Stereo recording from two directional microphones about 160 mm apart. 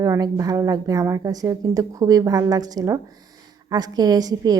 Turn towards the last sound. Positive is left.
turn(degrees=-25)  # may be behind; listen again after turning